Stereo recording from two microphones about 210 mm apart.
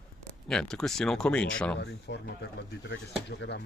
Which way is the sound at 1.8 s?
50° left (ahead or behind).